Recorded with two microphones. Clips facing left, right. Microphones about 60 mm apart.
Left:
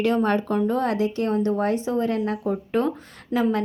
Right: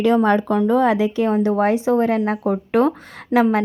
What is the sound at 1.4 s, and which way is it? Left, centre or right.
A woman's voice, right.